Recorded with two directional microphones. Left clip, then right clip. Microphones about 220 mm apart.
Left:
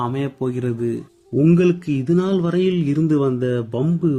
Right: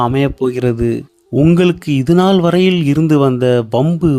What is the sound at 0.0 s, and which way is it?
A man's voice, 45° right (ahead or behind).